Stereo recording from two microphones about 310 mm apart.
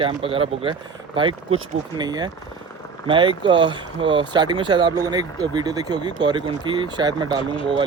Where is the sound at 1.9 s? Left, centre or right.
Centre.